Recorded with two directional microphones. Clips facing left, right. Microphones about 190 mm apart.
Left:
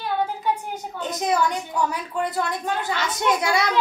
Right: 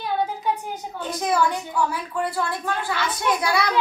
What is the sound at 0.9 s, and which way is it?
A woman's voice, 20° left (ahead or behind).